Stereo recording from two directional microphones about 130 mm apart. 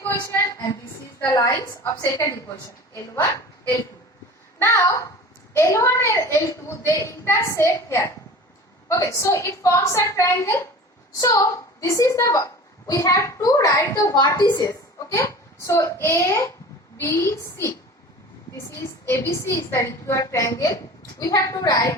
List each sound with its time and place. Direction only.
0.0 s a woman's voice: 15° left (ahead or behind)
4.6 s a woman's voice: 20° left (ahead or behind)